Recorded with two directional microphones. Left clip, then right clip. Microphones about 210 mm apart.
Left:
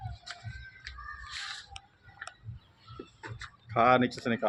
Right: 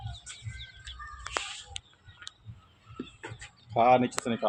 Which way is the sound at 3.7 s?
10° left (ahead or behind).